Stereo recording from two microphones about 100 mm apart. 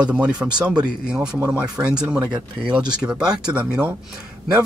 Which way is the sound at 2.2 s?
45° right (ahead or behind).